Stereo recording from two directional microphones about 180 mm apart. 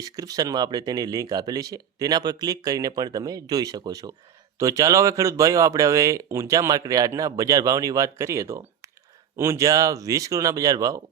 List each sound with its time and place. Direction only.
0.0 s speech: 20° right (ahead or behind)